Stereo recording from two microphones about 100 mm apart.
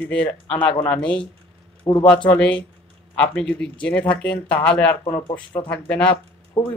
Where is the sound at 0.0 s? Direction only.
15° left (ahead or behind).